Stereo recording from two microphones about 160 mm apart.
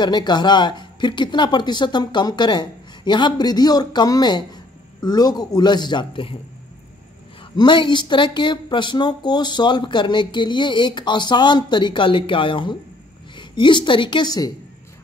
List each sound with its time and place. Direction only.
0.0 s speech: 25° left (ahead or behind)
7.5 s speech: 30° left (ahead or behind)